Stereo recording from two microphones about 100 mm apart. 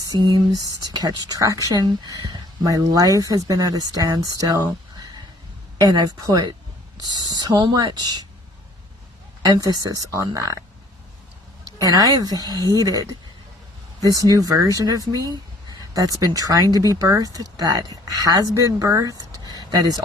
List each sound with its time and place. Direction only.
0.0 s speech: 40° right (ahead or behind)
9.4 s speech: 40° right (ahead or behind)
11.8 s speech: 35° right (ahead or behind)